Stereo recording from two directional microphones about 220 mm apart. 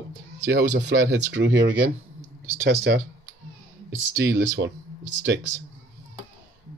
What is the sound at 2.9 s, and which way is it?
Speech, 50° right (ahead or behind).